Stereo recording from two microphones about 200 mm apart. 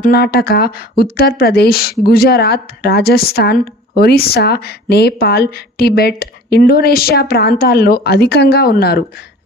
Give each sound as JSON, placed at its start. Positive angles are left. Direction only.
{"t": 0.0, "sound": "a woman's voice", "side_deg": 50}